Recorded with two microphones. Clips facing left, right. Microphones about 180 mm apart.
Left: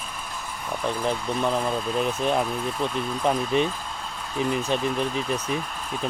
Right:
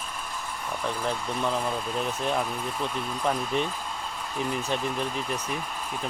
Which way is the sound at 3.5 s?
20° left (ahead or behind).